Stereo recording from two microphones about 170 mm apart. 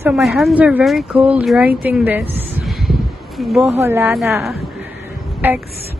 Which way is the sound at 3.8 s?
15° right (ahead or behind).